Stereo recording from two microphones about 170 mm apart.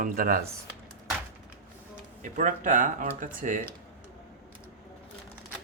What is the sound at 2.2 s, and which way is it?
Speech, 50° right (ahead or behind).